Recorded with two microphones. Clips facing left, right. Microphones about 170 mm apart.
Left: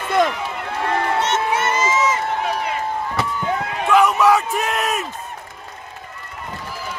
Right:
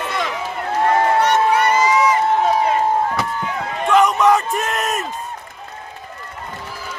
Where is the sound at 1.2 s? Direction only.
25° left (ahead or behind).